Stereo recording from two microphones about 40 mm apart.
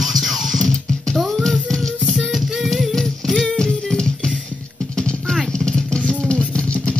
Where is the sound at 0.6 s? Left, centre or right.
Centre.